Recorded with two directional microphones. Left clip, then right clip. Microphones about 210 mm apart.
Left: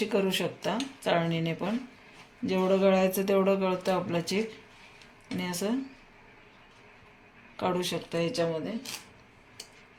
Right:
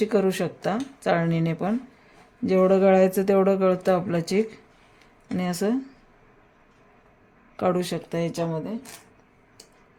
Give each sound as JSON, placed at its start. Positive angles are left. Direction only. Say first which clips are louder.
{"t": 0.0, "sound": "speech", "louder": "right 5 dB", "side_deg": -50}
{"t": 7.5, "sound": "speech", "louder": "right 5 dB", "side_deg": -55}